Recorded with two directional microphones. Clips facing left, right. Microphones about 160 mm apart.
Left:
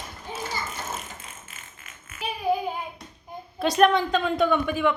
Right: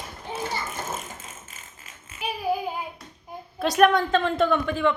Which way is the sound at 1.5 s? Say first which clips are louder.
Even; 35° right (ahead or behind).